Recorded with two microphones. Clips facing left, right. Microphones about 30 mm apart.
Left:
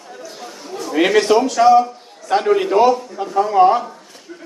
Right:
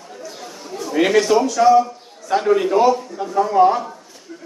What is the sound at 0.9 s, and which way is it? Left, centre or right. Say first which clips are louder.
Speech: left 1 dB; left.